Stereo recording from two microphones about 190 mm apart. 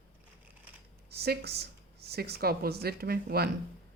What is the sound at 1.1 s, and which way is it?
Speech, 55° right (ahead or behind).